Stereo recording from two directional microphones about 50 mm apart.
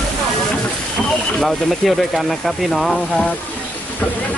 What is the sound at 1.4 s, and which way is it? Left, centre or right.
Speech, centre.